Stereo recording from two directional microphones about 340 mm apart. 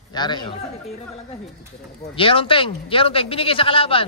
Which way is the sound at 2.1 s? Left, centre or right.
Centre.